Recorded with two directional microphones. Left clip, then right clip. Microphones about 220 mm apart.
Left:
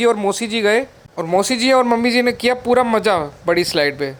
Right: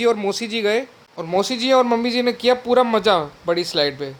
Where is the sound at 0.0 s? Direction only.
15° left (ahead or behind).